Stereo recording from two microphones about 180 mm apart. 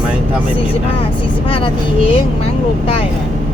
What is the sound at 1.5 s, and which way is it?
Speech, 30° left (ahead or behind).